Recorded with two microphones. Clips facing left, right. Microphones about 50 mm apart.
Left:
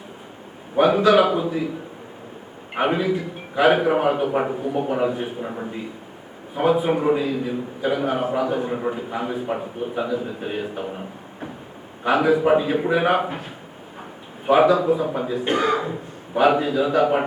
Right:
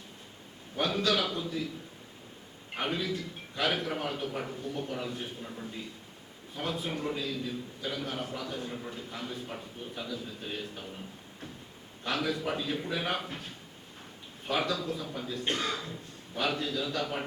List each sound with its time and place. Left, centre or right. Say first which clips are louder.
0.8 s a man's voice: left 14 dB; left
2.7 s a man's voice: left 12 dB; left
5.4 s a man's voice: left 13 dB; left
6.5 s a man's voice: left 16 dB; left
12.0 s a man's voice: left 14 dB; left
15.4 s a man's voice: left 12 dB; centre